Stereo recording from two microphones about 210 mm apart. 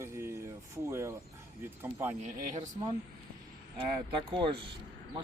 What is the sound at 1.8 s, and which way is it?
Speech, 10° right (ahead or behind).